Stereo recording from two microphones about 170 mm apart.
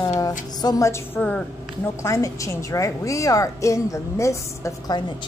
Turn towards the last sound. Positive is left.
turn(degrees=20)  # may be behind; listen again after turning